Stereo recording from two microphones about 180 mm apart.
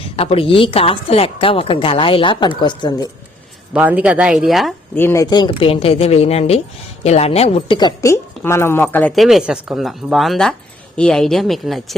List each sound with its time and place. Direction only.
0.2 s a woman's voice: 30° left (ahead or behind)
3.7 s speech: 10° right (ahead or behind)
4.9 s a woman's voice: 15° left (ahead or behind)